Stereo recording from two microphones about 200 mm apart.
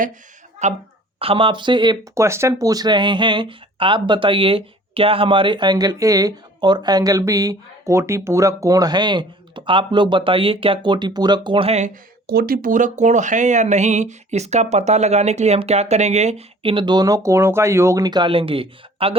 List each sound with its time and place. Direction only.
0.6 s speech: 35° right (ahead or behind)
12.3 s speech: 50° right (ahead or behind); by 19.1 s 30° right (ahead or behind)